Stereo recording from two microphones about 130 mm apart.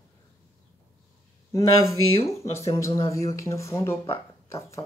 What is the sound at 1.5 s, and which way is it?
Speech, 25° left (ahead or behind).